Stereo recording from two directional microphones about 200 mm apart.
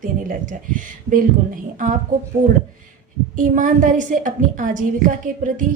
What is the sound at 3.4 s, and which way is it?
A woman's voice, 40° right (ahead or behind).